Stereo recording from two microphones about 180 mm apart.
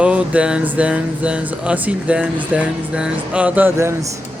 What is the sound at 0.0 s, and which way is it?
Speech, 5° right (ahead or behind).